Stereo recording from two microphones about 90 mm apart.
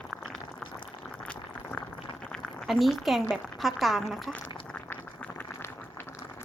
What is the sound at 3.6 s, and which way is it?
Speech, centre (ahead or behind).